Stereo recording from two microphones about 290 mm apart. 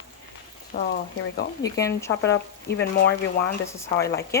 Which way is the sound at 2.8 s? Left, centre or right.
Left.